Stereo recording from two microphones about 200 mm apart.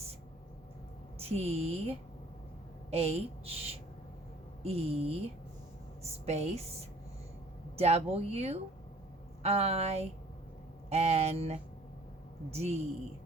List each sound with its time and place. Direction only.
1.2 s a woman's voice: 30° right (ahead or behind)
7.8 s speech: 30° right (ahead or behind)